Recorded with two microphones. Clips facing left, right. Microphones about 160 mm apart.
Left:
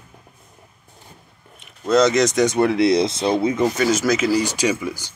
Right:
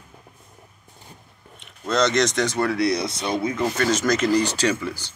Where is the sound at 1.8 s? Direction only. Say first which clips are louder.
Left 5 dB; 5° left (ahead or behind); by 3.6 s 25° left (ahead or behind).